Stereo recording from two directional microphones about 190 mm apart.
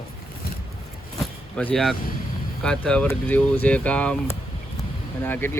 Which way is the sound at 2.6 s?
5° left (ahead or behind).